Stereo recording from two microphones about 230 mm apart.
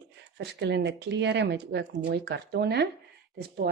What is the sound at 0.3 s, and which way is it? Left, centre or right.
A woman's voice, right.